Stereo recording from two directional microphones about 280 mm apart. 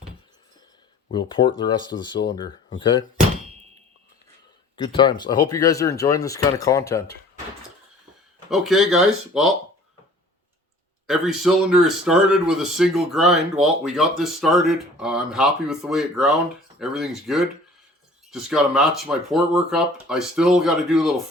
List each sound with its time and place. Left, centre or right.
1.1 s speech: centre
4.8 s speech: centre
8.4 s speech: centre
11.0 s speech: centre